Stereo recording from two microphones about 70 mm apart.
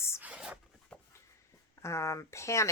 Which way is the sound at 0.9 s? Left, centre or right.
Centre.